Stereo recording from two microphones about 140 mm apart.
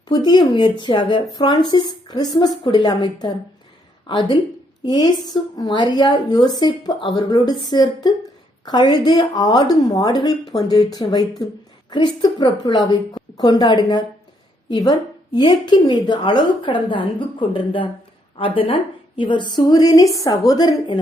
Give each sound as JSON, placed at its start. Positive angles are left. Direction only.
{"t": 0.1, "sound": "a woman's voice", "side_deg": 30}